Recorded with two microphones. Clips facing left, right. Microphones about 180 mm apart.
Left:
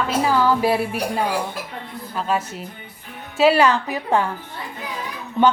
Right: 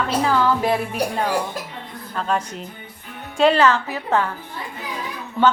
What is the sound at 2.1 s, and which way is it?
A man's voice, 5° left (ahead or behind).